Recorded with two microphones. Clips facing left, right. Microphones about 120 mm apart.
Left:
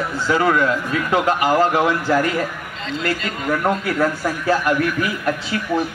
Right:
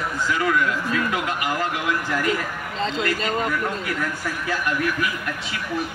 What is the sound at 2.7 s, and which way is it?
Speech, 35° right (ahead or behind).